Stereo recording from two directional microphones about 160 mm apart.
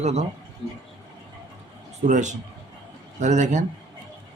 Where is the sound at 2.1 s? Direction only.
50° right (ahead or behind).